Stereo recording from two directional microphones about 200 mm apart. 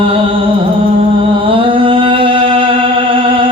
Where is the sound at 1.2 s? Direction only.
25° right (ahead or behind).